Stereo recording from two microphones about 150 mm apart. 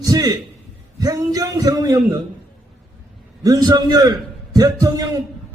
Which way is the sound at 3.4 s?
25° right (ahead or behind).